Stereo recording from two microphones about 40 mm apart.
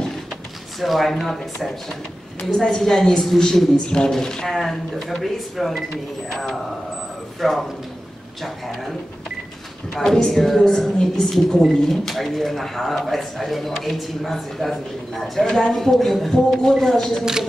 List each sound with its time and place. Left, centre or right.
0.7 s speech: centre
4.6 s speech: centre
9.9 s speech: centre
17.2 s speech: centre